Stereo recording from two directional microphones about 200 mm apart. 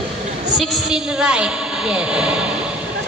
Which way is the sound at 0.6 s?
Centre (ahead or behind).